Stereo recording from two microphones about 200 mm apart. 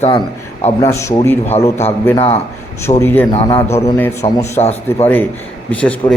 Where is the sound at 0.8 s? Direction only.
15° left (ahead or behind).